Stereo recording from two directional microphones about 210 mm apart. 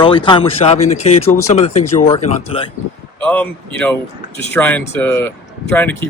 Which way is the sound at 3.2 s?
5° left (ahead or behind).